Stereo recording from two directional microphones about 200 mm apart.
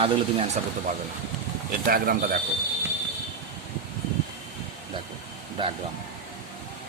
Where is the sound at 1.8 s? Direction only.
45° right (ahead or behind).